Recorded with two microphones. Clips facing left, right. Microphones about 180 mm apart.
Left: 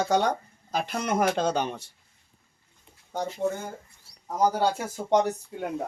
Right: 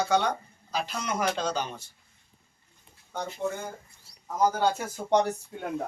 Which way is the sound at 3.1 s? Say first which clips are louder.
Left 4 dB; 40° left (ahead or behind).